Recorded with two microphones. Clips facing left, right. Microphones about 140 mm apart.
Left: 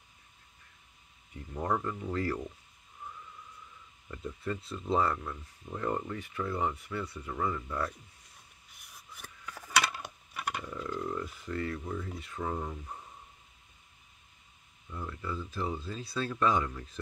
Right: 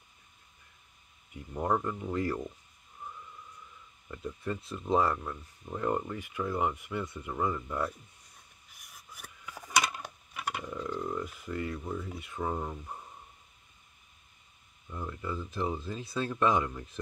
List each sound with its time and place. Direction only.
1.3 s speech: 10° right (ahead or behind)
4.1 s speech: 5° right (ahead or behind)
8.7 s a sound: 5° right (ahead or behind)
9.9 s speech: centre (ahead or behind)
14.9 s speech: 15° right (ahead or behind)